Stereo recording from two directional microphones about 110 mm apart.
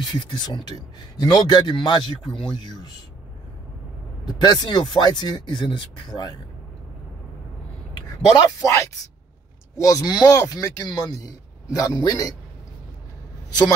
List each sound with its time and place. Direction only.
0.1 s a man's voice: 40° left (ahead or behind)
4.3 s a man's voice: 40° left (ahead or behind)
8.4 s a man's voice: 30° left (ahead or behind)